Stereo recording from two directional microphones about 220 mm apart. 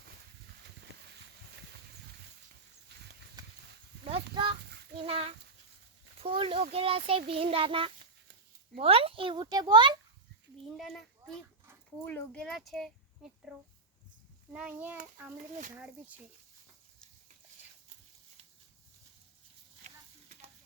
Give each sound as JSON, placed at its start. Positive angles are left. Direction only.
{"t": 2.9, "sound": "a sound", "side_deg": -50}
{"t": 4.1, "sound": "speech", "side_deg": -25}
{"t": 10.8, "sound": "a child's voice", "side_deg": 0}
{"t": 14.5, "sound": "a child's voice", "side_deg": -5}
{"t": 19.8, "sound": "sizzle", "side_deg": -35}